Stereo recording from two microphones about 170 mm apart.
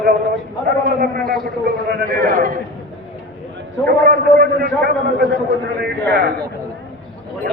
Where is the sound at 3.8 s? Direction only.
60° right (ahead or behind).